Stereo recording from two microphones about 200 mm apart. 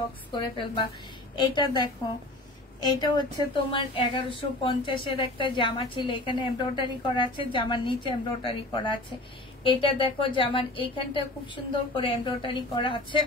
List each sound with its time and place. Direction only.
0.3 s a woman's voice: 25° left (ahead or behind)